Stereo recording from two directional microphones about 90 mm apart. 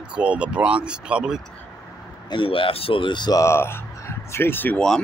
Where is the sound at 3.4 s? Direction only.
30° left (ahead or behind).